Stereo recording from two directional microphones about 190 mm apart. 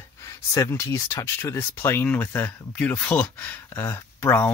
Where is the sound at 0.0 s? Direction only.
15° left (ahead or behind).